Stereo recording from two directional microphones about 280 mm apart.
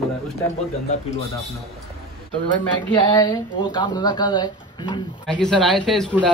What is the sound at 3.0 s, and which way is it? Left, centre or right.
Speech, centre.